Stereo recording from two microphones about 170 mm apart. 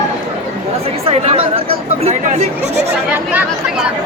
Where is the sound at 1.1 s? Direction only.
35° right (ahead or behind).